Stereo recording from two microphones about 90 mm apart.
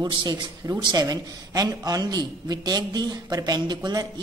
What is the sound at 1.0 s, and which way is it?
A man's voice, 45° right (ahead or behind).